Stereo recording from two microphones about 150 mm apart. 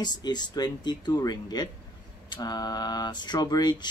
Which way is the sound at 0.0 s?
30° left (ahead or behind).